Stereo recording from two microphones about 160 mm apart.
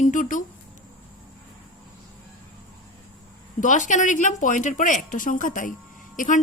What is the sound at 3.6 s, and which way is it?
A woman's voice, 50° left (ahead or behind).